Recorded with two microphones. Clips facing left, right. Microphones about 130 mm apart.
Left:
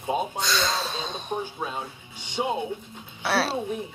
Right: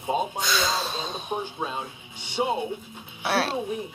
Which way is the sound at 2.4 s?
15° right (ahead or behind).